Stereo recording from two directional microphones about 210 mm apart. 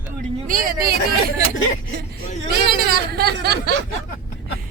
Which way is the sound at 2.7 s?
50° right (ahead or behind).